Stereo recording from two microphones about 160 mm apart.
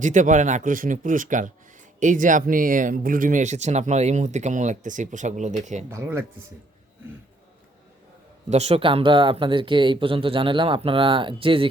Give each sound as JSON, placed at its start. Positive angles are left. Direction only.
{"t": 0.0, "sound": "speech", "side_deg": -50}
{"t": 5.9, "sound": "speech", "side_deg": -15}
{"t": 8.4, "sound": "speech", "side_deg": -45}